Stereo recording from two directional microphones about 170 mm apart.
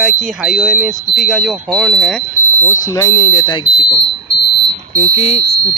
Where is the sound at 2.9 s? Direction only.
20° left (ahead or behind).